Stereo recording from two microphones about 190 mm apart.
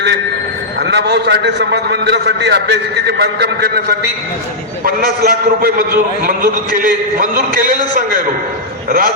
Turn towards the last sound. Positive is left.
turn(degrees=-45)  # may be behind; listen again after turning